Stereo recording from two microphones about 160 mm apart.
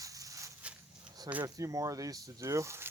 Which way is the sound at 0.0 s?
20° right (ahead or behind).